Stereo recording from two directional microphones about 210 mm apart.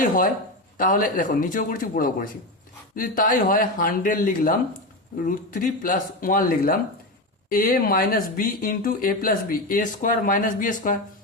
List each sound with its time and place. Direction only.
0.0 s speech: 40° left (ahead or behind)